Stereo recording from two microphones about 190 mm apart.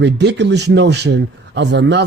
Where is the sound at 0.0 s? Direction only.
65° right (ahead or behind).